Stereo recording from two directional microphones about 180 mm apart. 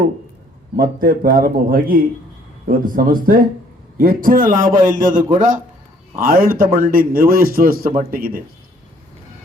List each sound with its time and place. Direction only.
0.8 s a man's voice: 50° right (ahead or behind)